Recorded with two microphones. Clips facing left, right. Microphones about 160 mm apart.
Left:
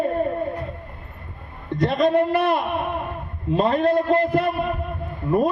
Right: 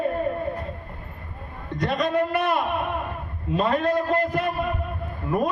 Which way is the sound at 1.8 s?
25° left (ahead or behind).